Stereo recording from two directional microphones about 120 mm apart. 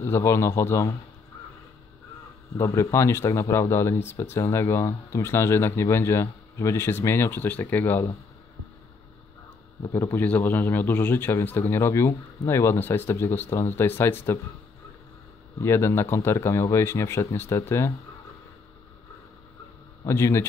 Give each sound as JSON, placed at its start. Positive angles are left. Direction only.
{"t": 0.0, "sound": "speech", "side_deg": 20}
{"t": 2.5, "sound": "speech", "side_deg": 25}
{"t": 9.9, "sound": "speech", "side_deg": 15}
{"t": 15.6, "sound": "speech", "side_deg": 20}
{"t": 20.1, "sound": "speech", "side_deg": 20}